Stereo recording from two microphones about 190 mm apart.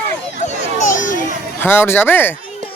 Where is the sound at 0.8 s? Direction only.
45° left (ahead or behind).